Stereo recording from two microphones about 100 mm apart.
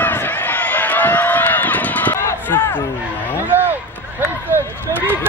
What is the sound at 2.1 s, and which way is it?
Run, 30° left (ahead or behind).